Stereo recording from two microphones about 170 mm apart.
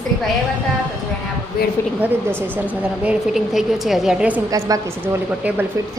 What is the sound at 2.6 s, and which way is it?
A woman's voice, 10° right (ahead or behind).